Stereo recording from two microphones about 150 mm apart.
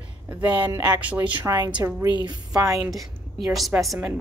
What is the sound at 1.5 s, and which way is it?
A woman's voice, 25° right (ahead or behind).